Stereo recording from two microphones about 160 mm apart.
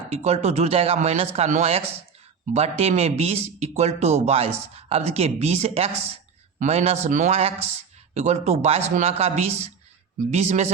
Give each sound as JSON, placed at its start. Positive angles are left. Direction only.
{"t": 0.1, "sound": "speech", "side_deg": -40}